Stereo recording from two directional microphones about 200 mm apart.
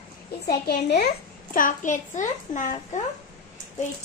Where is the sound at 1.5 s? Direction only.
40° left (ahead or behind).